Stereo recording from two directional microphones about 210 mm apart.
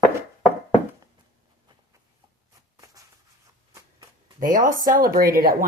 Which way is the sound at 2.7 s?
15° right (ahead or behind).